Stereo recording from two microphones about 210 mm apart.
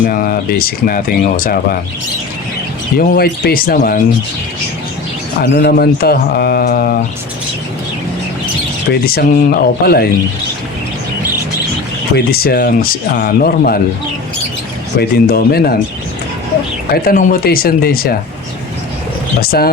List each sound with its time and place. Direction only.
0.0 s speech: 45° left (ahead or behind)
3.0 s speech: 45° left (ahead or behind)
5.4 s speech: 45° left (ahead or behind)
8.9 s speech: 45° left (ahead or behind)
12.1 s speech: 45° left (ahead or behind)
14.9 s speech: 45° left (ahead or behind)
16.9 s speech: 40° left (ahead or behind)
19.4 s speech: 45° left (ahead or behind)